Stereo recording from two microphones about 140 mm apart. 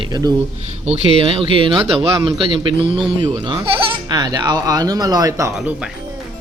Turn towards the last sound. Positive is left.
turn(degrees=-5)  # may be behind; listen again after turning